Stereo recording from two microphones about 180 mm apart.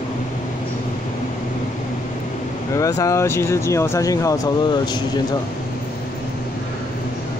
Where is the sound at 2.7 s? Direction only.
20° left (ahead or behind).